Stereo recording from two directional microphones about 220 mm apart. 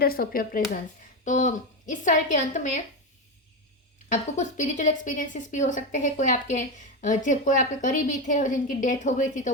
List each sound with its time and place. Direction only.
0.0 s speech: 45° left (ahead or behind)
4.1 s speech: 35° left (ahead or behind)